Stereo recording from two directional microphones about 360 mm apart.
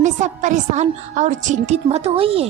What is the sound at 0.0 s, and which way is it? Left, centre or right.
A woman's voice, centre.